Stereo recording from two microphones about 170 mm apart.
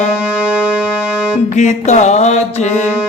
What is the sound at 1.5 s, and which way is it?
Music, 40° left (ahead or behind).